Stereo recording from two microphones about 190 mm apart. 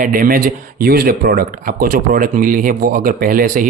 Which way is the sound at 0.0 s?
45° right (ahead or behind).